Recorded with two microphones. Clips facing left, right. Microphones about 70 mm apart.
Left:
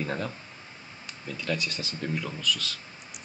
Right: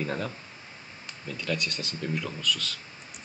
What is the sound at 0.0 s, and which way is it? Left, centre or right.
Speech, centre.